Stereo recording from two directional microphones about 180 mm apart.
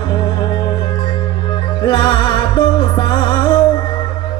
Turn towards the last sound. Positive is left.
turn(degrees=30)  # may be behind; listen again after turning